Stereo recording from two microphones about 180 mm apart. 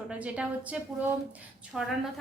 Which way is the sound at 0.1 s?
5° right (ahead or behind).